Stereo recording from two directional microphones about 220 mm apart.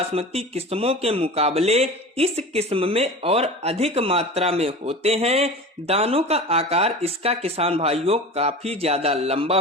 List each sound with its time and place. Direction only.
0.0 s speech: 25° right (ahead or behind)